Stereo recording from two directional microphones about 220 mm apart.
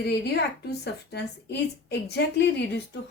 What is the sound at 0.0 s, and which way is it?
A woman's voice, 50° left (ahead or behind).